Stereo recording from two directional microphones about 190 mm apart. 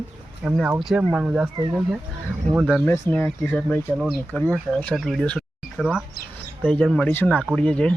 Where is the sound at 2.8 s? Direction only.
10° left (ahead or behind).